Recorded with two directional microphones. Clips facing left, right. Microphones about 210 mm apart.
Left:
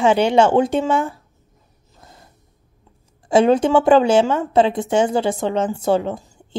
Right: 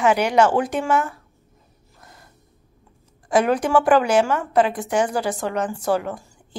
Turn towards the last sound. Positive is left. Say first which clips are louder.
# left 4 dB
turn(degrees=25)  # may be behind; listen again after turning